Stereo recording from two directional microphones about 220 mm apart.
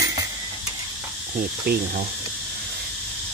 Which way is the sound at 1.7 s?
45° right (ahead or behind).